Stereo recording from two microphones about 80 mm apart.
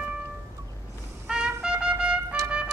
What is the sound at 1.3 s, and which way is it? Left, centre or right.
Trumpet, centre.